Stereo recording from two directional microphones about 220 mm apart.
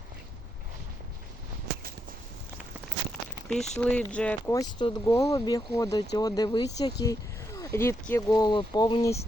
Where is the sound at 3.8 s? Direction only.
5° left (ahead or behind).